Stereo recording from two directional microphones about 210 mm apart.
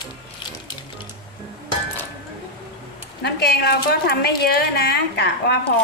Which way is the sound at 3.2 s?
50° left (ahead or behind).